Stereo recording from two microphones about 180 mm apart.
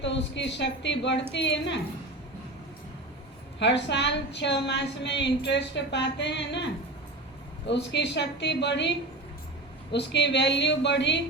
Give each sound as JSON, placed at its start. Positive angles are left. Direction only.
{"t": 0.0, "sound": "a woman's voice", "side_deg": 80}
{"t": 3.6, "sound": "a woman's voice", "side_deg": 75}
{"t": 7.7, "sound": "a woman's voice", "side_deg": 75}
{"t": 9.9, "sound": "a woman's voice", "side_deg": 70}